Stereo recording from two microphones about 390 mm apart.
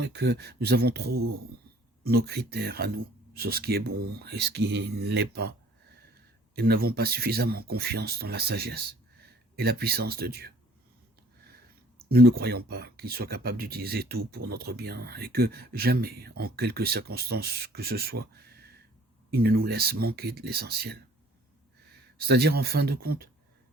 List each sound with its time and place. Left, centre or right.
0.2 s speech: right
1.1 s speech: right
2.0 s speech: right
6.6 s speech: right
22.3 s speech: right